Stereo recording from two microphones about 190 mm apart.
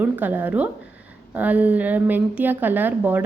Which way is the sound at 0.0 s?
10° right (ahead or behind).